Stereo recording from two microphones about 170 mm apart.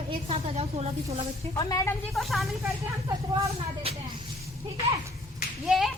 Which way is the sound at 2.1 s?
Centre (ahead or behind).